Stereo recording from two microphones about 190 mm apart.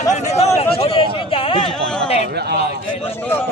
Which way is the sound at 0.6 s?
30° left (ahead or behind).